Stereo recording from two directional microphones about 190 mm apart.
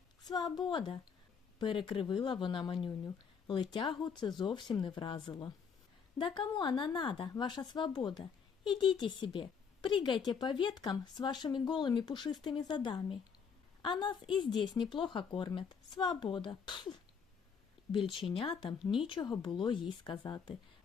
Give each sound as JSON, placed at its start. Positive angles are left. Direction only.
{"t": 0.3, "sound": "a woman's voice", "side_deg": 20}
{"t": 17.9, "sound": "a woman's voice", "side_deg": 25}